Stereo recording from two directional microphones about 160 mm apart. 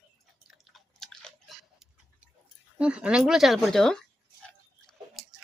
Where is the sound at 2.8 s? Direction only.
5° right (ahead or behind).